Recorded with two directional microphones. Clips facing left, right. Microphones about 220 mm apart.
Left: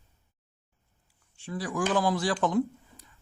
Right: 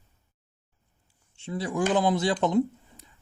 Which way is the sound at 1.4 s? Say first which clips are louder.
Right 3 dB; 25° right (ahead or behind).